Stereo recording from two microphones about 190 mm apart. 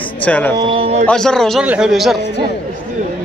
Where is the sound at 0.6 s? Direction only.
30° right (ahead or behind).